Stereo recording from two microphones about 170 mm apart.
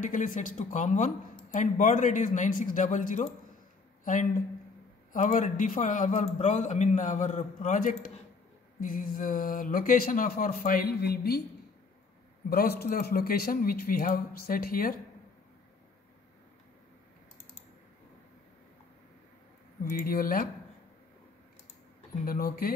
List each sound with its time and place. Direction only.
0.0 s speech: 50° left (ahead or behind); by 11.4 s 65° left (ahead or behind)
12.4 s speech: 65° left (ahead or behind)
19.8 s speech: 55° left (ahead or behind)
22.2 s speech: 60° left (ahead or behind)